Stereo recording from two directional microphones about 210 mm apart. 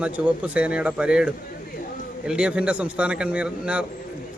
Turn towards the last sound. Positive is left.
turn(degrees=-5)  # may be behind; listen again after turning